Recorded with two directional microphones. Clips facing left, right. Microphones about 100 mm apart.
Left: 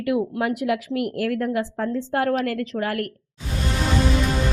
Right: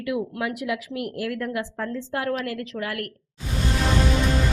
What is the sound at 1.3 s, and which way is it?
Speech, 35° left (ahead or behind).